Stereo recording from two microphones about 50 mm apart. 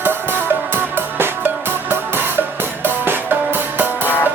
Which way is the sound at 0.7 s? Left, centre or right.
Right.